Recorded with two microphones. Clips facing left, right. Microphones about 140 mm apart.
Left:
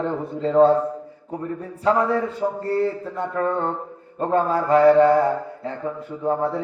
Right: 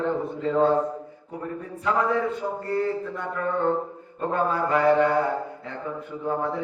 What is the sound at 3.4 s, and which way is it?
Speech, 35° left (ahead or behind).